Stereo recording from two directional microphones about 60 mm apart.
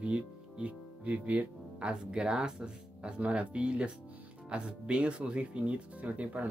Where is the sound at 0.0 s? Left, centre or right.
Centre.